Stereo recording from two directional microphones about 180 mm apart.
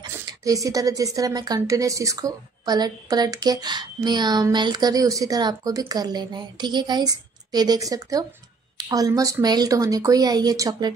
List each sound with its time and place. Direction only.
0.2 s speech: 20° right (ahead or behind)